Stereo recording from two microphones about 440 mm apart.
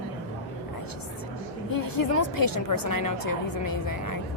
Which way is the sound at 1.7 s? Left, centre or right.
Left.